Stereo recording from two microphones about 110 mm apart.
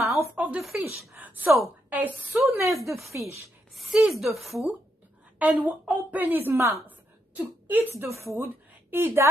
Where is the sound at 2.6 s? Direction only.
25° right (ahead or behind).